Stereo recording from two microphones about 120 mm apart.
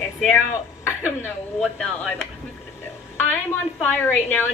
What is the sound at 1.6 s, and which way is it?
Speech, 5° left (ahead or behind).